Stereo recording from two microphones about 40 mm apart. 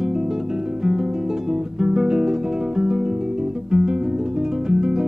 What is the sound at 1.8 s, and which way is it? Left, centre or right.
Guitar, centre.